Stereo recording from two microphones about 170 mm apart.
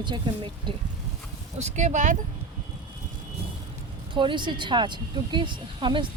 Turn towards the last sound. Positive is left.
turn(degrees=-30)  # may be behind; listen again after turning